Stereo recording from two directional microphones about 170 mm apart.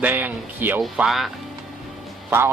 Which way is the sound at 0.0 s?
10° right (ahead or behind).